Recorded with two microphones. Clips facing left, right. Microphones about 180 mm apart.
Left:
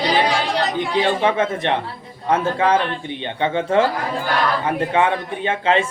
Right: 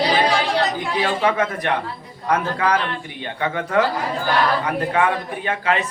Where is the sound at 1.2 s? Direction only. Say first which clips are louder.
Left 1 dB; 25° left (ahead or behind).